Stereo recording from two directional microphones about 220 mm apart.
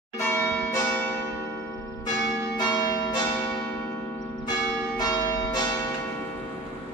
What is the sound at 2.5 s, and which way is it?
Change ringing, 20° left (ahead or behind).